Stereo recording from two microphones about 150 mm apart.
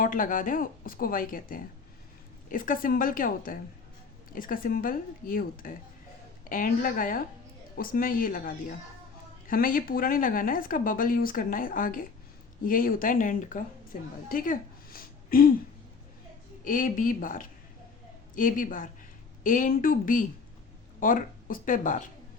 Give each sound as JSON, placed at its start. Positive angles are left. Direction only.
{"t": 0.0, "sound": "speech", "side_deg": 65}
{"t": 14.3, "sound": "a sound", "side_deg": 65}
{"t": 16.6, "sound": "speech", "side_deg": 60}